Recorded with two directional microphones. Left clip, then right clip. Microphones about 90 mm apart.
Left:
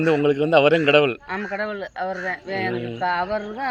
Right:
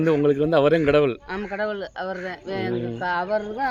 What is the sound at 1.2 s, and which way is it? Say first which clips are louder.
Speech: left 1 dB; 50° right (ahead or behind).